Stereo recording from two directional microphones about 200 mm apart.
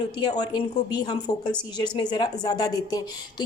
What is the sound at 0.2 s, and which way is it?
A woman's voice, 20° left (ahead or behind).